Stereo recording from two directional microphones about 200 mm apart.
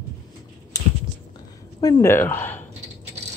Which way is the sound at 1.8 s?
20° left (ahead or behind).